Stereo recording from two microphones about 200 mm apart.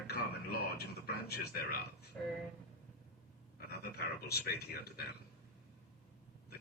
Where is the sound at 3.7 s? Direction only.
50° left (ahead or behind).